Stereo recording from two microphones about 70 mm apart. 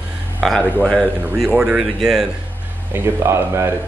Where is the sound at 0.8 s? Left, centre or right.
Centre.